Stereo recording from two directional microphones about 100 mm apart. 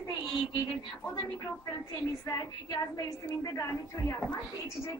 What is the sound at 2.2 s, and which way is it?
A woman's voice, 35° left (ahead or behind).